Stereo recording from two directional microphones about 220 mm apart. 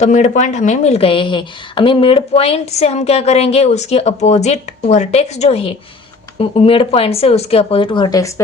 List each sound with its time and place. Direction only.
0.0 s a woman's voice: 30° left (ahead or behind)